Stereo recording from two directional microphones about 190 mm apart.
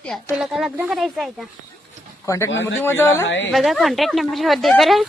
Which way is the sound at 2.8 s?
10° left (ahead or behind).